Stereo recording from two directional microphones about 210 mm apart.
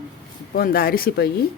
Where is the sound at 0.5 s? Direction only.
45° left (ahead or behind).